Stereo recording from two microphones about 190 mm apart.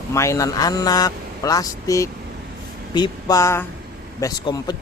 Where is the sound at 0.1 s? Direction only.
15° left (ahead or behind).